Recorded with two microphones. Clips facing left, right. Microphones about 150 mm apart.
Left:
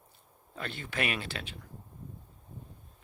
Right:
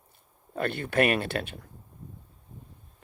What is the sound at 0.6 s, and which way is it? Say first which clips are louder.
Speech: right 10 dB; 60° right (ahead or behind).